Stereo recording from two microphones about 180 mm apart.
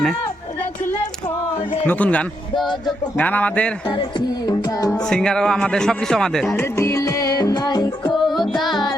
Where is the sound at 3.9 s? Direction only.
25° left (ahead or behind).